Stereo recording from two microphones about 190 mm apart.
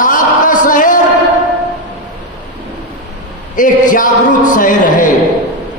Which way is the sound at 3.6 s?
45° left (ahead or behind).